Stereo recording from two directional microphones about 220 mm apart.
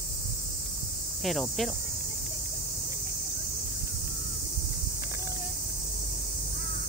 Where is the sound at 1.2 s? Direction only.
Centre (ahead or behind).